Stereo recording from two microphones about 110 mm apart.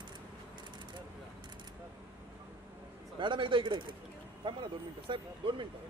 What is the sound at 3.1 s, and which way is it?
Speech, 45° right (ahead or behind).